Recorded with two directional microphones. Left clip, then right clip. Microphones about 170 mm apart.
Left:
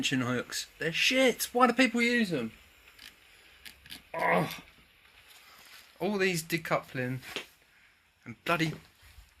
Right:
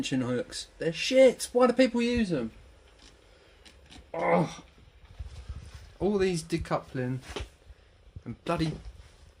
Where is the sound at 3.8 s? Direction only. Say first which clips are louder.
Right 1 dB; 5° left (ahead or behind).